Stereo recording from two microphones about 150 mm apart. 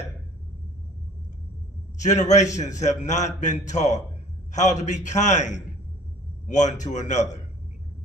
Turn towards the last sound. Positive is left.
turn(degrees=50)  # may be behind; listen again after turning